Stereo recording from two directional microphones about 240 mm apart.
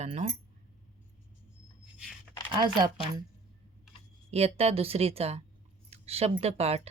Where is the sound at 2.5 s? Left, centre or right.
Centre.